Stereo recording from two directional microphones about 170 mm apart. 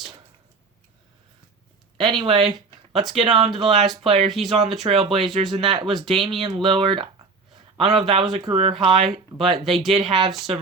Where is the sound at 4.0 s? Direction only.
35° right (ahead or behind).